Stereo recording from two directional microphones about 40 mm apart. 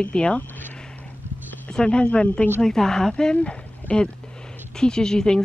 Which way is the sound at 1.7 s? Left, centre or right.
Left.